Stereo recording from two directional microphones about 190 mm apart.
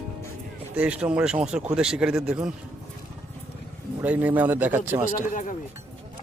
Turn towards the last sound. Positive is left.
turn(degrees=40)  # may be behind; listen again after turning